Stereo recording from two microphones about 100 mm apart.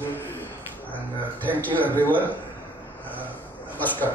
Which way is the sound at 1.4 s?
15° left (ahead or behind).